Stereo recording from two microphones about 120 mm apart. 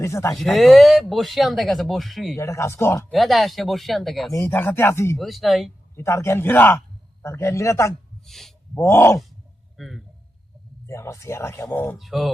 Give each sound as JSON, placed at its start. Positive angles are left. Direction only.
{"t": 0.0, "sound": "speech", "side_deg": 25}
{"t": 0.3, "sound": "speech", "side_deg": 0}
{"t": 2.4, "sound": "speech", "side_deg": 25}
{"t": 3.1, "sound": "speech", "side_deg": 0}
{"t": 4.3, "sound": "speech", "side_deg": 20}
{"t": 5.1, "sound": "speech", "side_deg": 0}
{"t": 6.0, "sound": "speech", "side_deg": 25}
{"t": 8.2, "sound": "speech", "side_deg": 5}
{"t": 8.7, "sound": "speech", "side_deg": 20}
{"t": 9.7, "sound": "a man's voice", "side_deg": 0}
{"t": 10.8, "sound": "speech", "side_deg": 25}
{"t": 11.9, "sound": "speech", "side_deg": 0}